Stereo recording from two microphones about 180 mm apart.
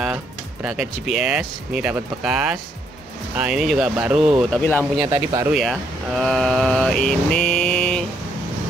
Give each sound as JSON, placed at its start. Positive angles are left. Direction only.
{"t": 0.0, "sound": "speech", "side_deg": -5}
{"t": 4.6, "sound": "speech", "side_deg": 10}
{"t": 5.0, "sound": "speech", "side_deg": -15}
{"t": 5.5, "sound": "speech", "side_deg": 0}